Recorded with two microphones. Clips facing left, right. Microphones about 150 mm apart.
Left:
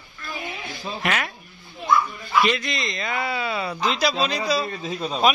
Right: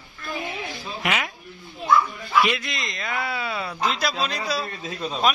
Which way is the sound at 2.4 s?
5° right (ahead or behind).